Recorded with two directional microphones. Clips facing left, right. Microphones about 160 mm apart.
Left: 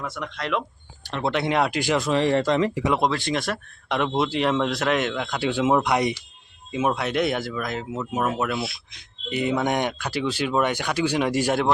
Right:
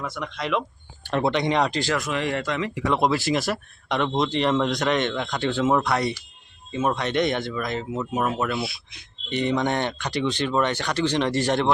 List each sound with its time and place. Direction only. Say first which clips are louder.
0.0 s speech: right 1 dB; centre (ahead or behind)
2.0 s speech: left 5 dB; 30° left (ahead or behind)
3.0 s speech: right 2 dB; 5° right (ahead or behind)